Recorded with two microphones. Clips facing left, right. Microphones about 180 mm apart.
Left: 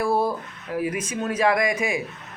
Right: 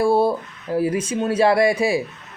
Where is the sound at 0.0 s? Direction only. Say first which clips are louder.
Right 5 dB; 30° right (ahead or behind).